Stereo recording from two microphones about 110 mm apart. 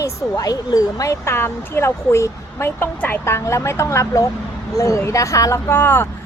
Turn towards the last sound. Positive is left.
turn(degrees=20)  # may be behind; listen again after turning